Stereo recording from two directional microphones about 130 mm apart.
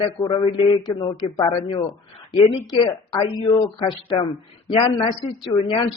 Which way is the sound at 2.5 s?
40° left (ahead or behind).